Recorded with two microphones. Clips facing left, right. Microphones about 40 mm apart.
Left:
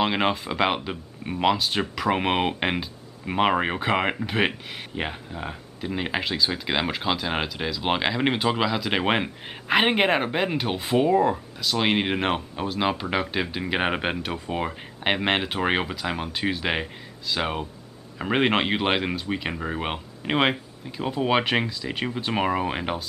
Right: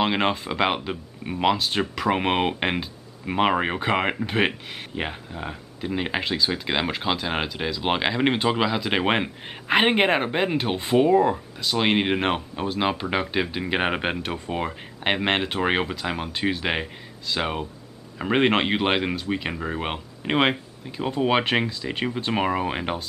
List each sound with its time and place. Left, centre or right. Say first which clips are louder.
0.0 s speech: right 1 dB; centre